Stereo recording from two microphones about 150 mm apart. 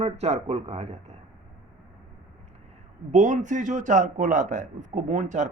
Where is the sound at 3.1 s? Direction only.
55° right (ahead or behind).